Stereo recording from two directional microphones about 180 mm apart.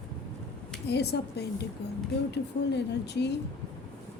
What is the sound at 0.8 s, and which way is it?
A woman's voice, 65° left (ahead or behind).